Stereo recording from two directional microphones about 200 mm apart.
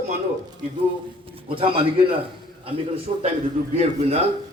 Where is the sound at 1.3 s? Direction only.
25° right (ahead or behind).